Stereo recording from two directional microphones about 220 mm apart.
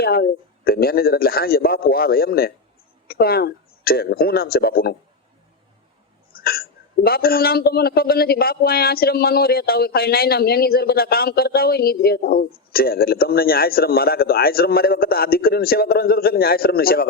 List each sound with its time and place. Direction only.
0.0 s speech: 45° left (ahead or behind)
6.3 s speech: 45° left (ahead or behind)